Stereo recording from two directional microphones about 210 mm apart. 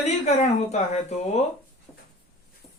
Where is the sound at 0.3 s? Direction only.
30° left (ahead or behind).